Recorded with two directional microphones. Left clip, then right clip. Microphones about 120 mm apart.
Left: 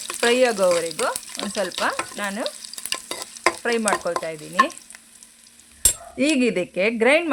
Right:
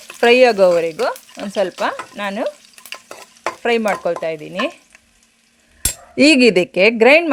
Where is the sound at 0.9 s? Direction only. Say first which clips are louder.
Right 4 dB; 30° right (ahead or behind).